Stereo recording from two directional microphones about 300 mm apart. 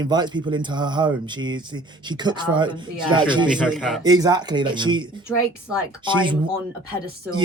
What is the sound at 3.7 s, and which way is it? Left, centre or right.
Speech, centre.